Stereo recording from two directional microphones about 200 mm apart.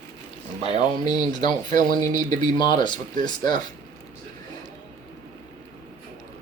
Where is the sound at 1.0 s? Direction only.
20° left (ahead or behind).